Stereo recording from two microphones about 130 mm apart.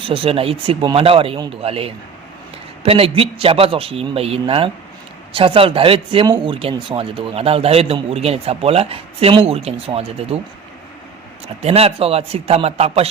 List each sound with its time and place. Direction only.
0.0 s a man's voice: 45° right (ahead or behind)
11.6 s a man's voice: 50° right (ahead or behind)